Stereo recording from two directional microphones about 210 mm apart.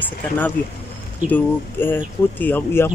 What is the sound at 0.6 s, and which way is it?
Speech, 45° left (ahead or behind).